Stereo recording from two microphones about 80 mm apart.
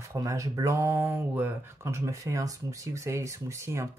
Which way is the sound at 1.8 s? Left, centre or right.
Right.